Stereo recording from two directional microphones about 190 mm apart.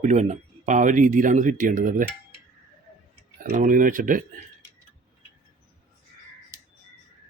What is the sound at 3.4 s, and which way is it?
Speech, 45° right (ahead or behind).